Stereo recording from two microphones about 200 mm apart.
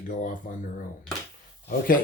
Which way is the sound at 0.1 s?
40° left (ahead or behind).